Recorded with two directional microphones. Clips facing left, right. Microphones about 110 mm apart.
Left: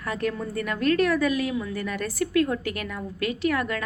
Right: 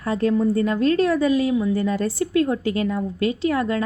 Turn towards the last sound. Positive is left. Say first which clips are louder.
# right 4 dB
turn(degrees=-25)  # may be behind; listen again after turning